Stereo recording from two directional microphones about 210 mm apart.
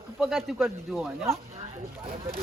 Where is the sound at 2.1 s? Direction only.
25° right (ahead or behind).